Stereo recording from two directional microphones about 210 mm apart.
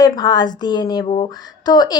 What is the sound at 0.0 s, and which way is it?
A woman's voice, 20° left (ahead or behind).